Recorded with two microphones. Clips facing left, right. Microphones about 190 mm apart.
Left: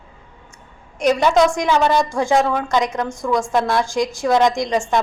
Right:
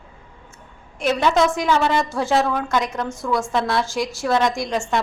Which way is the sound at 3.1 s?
15° left (ahead or behind).